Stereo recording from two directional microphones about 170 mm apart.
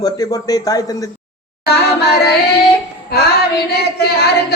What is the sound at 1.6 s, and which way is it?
Speech, 75° left (ahead or behind).